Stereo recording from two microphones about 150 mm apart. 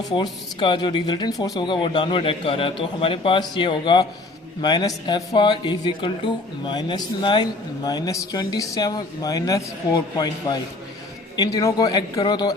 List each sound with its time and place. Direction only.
0.1 s speech: 30° left (ahead or behind)